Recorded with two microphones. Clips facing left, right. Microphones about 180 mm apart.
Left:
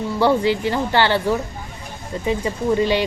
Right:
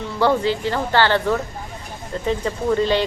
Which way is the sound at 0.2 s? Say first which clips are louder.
Left 1 dB; 15° left (ahead or behind).